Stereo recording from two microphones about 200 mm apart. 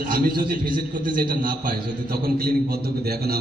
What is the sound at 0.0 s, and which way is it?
A man's voice, 50° right (ahead or behind).